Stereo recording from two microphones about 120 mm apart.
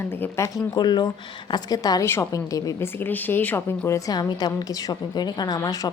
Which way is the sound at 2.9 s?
15° left (ahead or behind).